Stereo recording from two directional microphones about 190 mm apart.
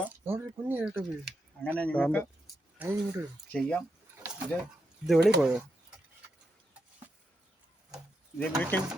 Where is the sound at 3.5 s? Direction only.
5° left (ahead or behind).